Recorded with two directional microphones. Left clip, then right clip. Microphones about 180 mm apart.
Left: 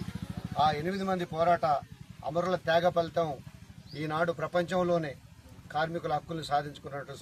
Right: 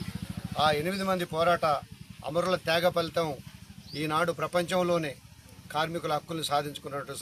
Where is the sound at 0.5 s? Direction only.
Centre (ahead or behind).